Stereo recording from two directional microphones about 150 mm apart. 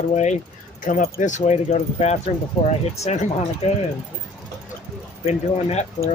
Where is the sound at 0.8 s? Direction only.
60° left (ahead or behind).